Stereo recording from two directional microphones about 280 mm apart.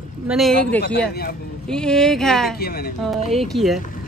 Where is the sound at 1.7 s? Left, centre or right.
Centre.